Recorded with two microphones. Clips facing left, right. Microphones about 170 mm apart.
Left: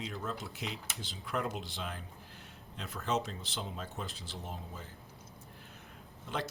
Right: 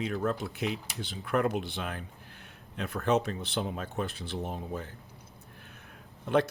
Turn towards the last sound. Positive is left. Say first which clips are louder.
# right 12 dB
turn(degrees=-60)  # may be behind; listen again after turning